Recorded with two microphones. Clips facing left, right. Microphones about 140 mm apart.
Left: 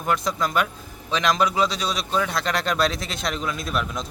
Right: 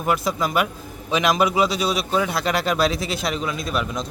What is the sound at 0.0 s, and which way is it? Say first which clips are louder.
A man's voice: right 2 dB; 5° right (ahead or behind).